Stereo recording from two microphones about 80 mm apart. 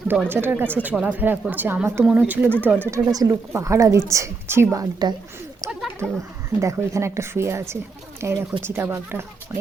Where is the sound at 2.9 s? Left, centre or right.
Right.